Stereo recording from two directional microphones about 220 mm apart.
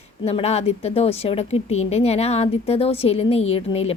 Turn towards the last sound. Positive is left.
turn(degrees=25)  # may be behind; listen again after turning